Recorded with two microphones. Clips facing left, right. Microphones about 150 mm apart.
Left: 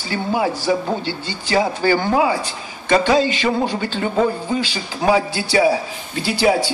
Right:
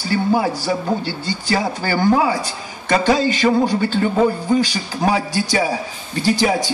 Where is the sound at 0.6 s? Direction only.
40° right (ahead or behind).